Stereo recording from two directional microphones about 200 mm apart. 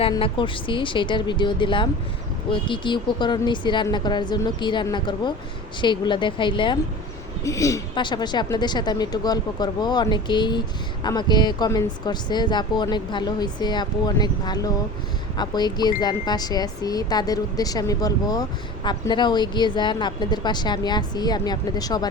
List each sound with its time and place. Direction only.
0.0 s speech: 25° left (ahead or behind)